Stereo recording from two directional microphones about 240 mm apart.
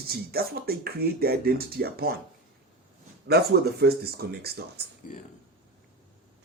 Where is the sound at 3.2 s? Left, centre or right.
Right.